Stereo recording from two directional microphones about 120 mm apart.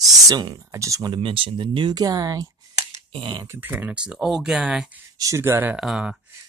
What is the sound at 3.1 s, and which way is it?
Speech, 40° right (ahead or behind).